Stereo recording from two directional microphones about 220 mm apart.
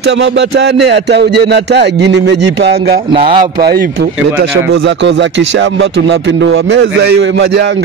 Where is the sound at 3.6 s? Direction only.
45° right (ahead or behind).